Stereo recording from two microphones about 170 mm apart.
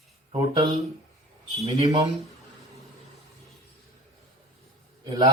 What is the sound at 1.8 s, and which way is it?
Speech, 20° right (ahead or behind).